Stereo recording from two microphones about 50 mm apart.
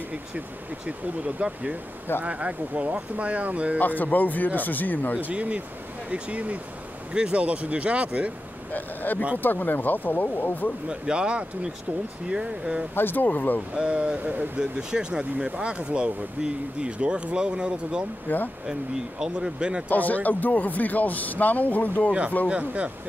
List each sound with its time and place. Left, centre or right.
0.8 s speech: right
3.8 s speech: left
5.2 s speech: right
8.7 s speech: left
10.9 s speech: centre
12.9 s speech: left
13.7 s speech: right
14.6 s speech: centre
18.3 s speech: left
18.7 s speech: centre
19.9 s speech: left
22.5 s speech: right